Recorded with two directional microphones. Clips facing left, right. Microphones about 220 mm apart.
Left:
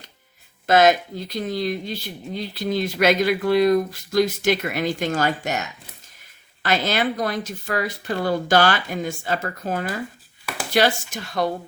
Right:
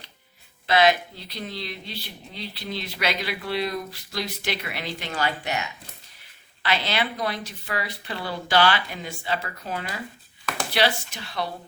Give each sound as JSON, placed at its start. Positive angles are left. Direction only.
{"t": 0.7, "sound": "speech", "side_deg": 45}